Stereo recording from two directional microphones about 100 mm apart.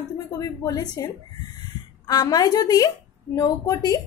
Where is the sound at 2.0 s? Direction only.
40° left (ahead or behind).